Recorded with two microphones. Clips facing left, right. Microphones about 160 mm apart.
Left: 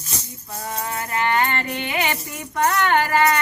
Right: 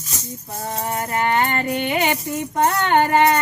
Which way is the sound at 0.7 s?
30° right (ahead or behind).